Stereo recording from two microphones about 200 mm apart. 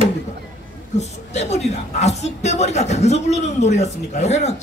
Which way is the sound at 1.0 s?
35° left (ahead or behind).